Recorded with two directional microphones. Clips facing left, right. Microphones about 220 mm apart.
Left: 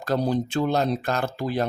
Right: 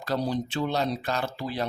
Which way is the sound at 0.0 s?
50° left (ahead or behind).